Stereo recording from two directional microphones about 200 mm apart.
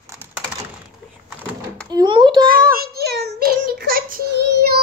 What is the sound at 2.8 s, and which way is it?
Child singing, 55° right (ahead or behind).